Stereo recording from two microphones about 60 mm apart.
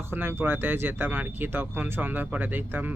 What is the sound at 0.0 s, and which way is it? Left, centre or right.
Speech, right.